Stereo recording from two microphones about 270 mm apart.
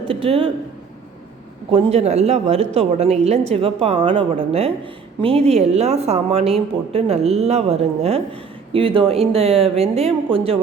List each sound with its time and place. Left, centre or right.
0.1 s speech: right
1.7 s speech: right